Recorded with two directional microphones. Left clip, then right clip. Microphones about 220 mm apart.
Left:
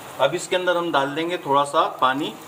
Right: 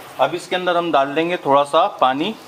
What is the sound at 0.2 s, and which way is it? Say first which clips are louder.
A man's voice: right 2 dB; 45° right (ahead or behind).